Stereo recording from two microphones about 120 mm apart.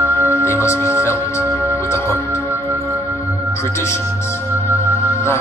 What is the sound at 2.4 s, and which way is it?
Music, 25° right (ahead or behind).